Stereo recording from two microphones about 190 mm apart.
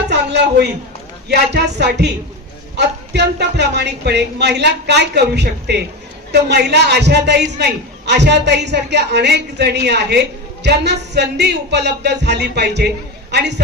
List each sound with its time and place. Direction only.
0.1 s a woman's voice: 65° right (ahead or behind)